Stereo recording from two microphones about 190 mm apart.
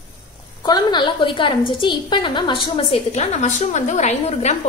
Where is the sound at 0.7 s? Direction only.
20° left (ahead or behind).